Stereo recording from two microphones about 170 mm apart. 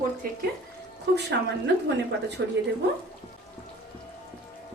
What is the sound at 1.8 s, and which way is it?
Speech, 80° right.